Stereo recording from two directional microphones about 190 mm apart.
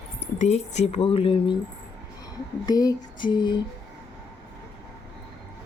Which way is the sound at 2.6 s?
20° left (ahead or behind).